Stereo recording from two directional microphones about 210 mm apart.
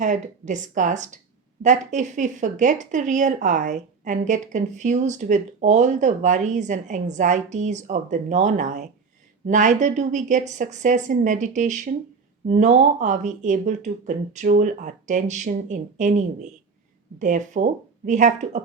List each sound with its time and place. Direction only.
0.0 s speech: 35° right (ahead or behind)